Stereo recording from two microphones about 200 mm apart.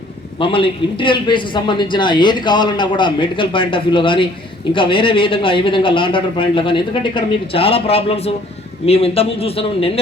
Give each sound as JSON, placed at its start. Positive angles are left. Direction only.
{"t": 0.3, "sound": "a man's voice", "side_deg": 25}